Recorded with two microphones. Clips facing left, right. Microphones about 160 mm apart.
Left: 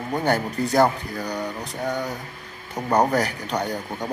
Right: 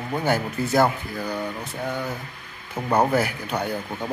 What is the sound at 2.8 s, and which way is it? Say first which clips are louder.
Speech: even; 15° left (ahead or behind).